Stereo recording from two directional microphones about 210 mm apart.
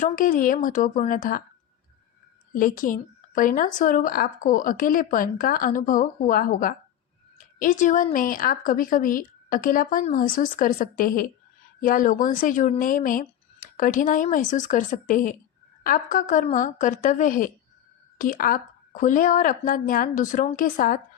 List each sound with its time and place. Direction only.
0.0 s speech: 40° left (ahead or behind)
2.6 s speech: 40° left (ahead or behind)